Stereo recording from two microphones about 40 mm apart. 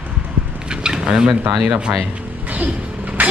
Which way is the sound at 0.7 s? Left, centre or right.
Centre.